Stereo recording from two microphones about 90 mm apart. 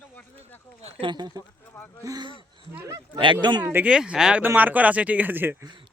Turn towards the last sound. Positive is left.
turn(degrees=-20)  # may be behind; listen again after turning